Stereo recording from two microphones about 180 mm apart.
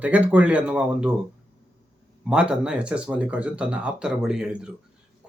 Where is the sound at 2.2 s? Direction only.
5° right (ahead or behind).